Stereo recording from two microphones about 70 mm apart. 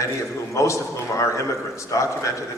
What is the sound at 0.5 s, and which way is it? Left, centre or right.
Speech, left.